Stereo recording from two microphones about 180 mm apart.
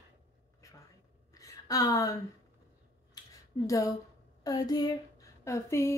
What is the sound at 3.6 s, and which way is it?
A woman's voice, 20° left (ahead or behind).